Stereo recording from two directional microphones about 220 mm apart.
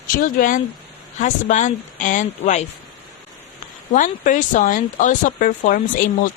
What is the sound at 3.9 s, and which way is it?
A woman's voice, 35° left (ahead or behind).